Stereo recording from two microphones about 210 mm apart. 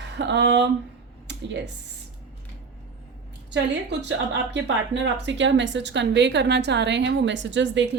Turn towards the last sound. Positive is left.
turn(degrees=-60)  # may be behind; listen again after turning